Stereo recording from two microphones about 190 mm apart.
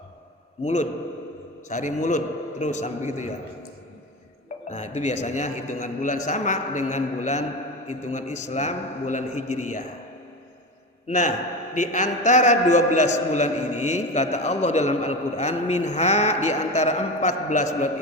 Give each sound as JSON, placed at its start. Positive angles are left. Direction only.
{"t": 0.6, "sound": "a man's voice", "side_deg": 40}
{"t": 4.7, "sound": "a man's voice", "side_deg": 40}
{"t": 11.7, "sound": "a man's voice", "side_deg": 40}